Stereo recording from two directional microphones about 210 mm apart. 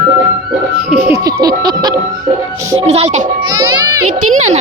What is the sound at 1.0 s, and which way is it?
Music, 15° right (ahead or behind).